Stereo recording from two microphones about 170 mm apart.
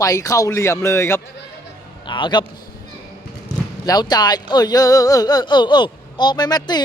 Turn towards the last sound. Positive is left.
turn(degrees=25)  # may be behind; listen again after turning